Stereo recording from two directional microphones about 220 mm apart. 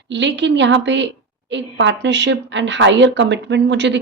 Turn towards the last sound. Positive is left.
turn(degrees=-55)  # may be behind; listen again after turning